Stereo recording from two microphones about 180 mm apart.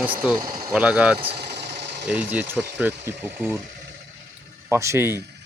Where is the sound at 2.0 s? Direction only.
10° right (ahead or behind).